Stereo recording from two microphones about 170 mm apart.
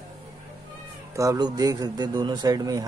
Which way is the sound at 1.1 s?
20° right (ahead or behind).